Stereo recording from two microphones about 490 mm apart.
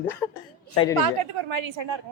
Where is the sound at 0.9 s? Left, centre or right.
Right.